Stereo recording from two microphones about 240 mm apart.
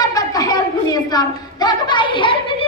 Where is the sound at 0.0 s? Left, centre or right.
Centre.